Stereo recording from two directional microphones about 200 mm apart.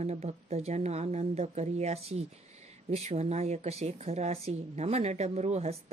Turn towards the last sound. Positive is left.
turn(degrees=-35)  # may be behind; listen again after turning